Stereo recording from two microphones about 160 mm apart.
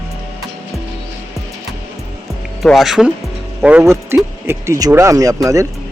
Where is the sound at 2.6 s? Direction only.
Centre (ahead or behind).